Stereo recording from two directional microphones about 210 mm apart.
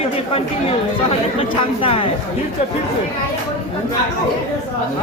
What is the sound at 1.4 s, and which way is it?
Speech, 25° left (ahead or behind).